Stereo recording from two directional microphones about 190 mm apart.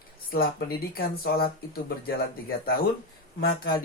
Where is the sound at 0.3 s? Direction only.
50° left (ahead or behind).